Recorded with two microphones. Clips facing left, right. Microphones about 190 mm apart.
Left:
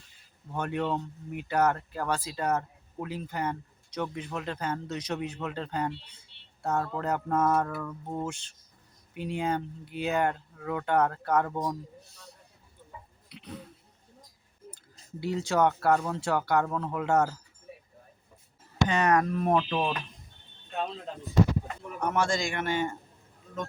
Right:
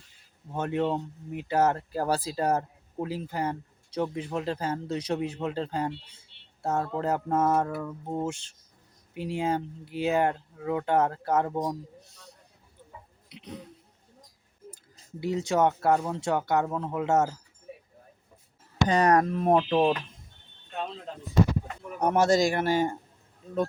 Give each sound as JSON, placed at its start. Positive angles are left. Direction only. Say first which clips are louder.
{"t": 0.5, "sound": "speech", "louder": "right 3 dB", "side_deg": -25}
{"t": 13.3, "sound": "speech", "louder": "right 1 dB", "side_deg": -20}
{"t": 15.2, "sound": "speech", "louder": "right 1 dB", "side_deg": -20}
{"t": 18.9, "sound": "speech", "louder": "right 4 dB", "side_deg": -35}
{"t": 22.0, "sound": "speech", "louder": "right 6 dB", "side_deg": -40}